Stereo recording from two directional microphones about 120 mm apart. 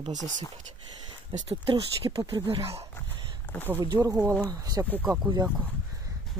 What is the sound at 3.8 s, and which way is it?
Speech, 35° right (ahead or behind).